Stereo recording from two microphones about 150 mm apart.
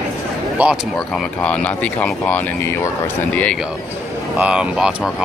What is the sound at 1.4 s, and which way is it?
Speech, 10° left (ahead or behind).